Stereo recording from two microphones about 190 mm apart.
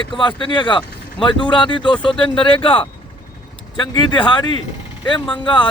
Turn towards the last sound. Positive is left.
turn(degrees=25)  # may be behind; listen again after turning